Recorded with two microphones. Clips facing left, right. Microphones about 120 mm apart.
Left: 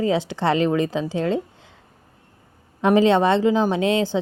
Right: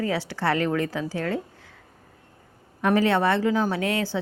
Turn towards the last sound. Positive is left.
turn(degrees=20)  # may be behind; listen again after turning